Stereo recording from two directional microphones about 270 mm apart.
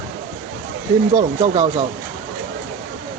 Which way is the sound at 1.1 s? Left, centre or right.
Centre.